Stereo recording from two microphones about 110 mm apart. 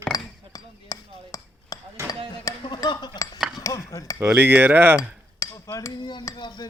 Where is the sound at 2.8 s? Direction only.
40° left (ahead or behind).